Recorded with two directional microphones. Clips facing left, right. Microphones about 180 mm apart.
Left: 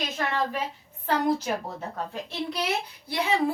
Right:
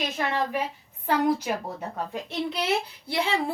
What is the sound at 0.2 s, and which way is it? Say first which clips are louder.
Speech: right 1 dB; 15° right (ahead or behind).